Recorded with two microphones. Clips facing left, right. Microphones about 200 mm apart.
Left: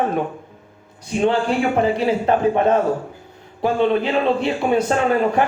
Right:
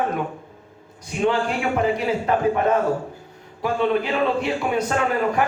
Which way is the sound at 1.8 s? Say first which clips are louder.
Left 3 dB; 30° left (ahead or behind).